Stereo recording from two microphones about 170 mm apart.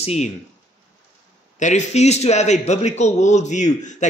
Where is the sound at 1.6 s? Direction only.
45° left (ahead or behind).